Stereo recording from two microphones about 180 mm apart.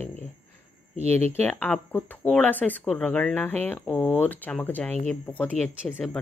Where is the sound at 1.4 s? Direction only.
10° left (ahead or behind).